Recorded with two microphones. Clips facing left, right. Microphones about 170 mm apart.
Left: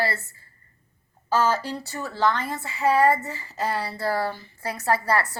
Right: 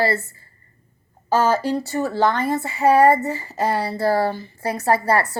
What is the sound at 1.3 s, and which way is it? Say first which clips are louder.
Speech: right 5 dB; 50° right (ahead or behind).